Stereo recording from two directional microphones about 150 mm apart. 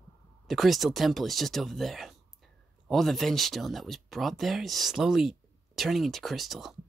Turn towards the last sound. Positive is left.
turn(degrees=0)  # may be behind; listen again after turning